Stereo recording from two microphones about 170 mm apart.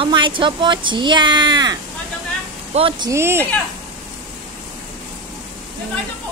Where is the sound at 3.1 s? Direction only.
15° right (ahead or behind).